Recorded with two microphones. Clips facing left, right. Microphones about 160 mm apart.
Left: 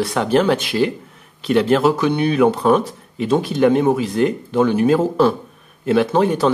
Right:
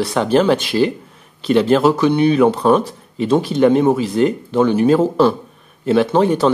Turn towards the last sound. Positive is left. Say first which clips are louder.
# right 2 dB
turn(degrees=0)  # may be behind; listen again after turning